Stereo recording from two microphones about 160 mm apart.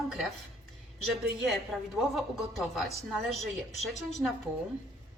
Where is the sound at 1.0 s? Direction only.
Centre (ahead or behind).